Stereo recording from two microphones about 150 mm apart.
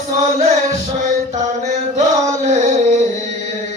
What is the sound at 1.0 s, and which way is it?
Mantra, 55° right (ahead or behind).